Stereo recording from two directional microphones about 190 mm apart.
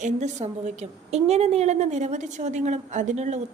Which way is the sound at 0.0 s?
40° right (ahead or behind).